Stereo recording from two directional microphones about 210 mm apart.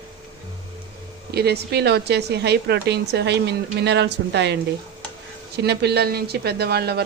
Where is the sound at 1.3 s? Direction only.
50° right (ahead or behind).